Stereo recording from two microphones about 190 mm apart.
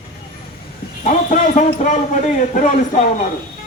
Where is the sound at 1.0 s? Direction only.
45° left (ahead or behind).